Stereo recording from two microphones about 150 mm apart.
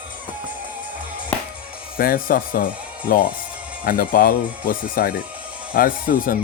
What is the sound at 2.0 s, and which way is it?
Speech, 75° left (ahead or behind).